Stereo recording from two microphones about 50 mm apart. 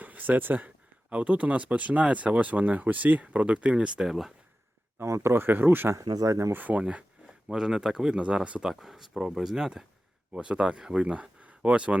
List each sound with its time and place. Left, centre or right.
0.0 s speech: right
4.0 s speech: centre
5.0 s speech: right
5.3 s speech: right
5.9 s speech: right
6.5 s speech: right
7.4 s speech: centre
8.6 s speech: centre
10.3 s speech: right